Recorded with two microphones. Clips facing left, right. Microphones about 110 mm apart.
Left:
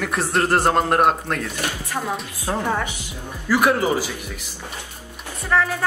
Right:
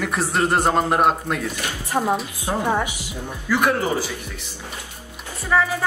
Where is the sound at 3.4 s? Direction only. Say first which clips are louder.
Left 2 dB; 5° left (ahead or behind).